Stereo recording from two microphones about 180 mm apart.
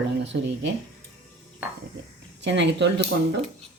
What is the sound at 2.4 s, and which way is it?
Speech, 75° right (ahead or behind).